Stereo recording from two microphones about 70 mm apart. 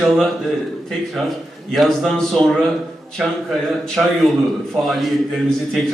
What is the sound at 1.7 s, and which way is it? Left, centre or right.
Speech, centre.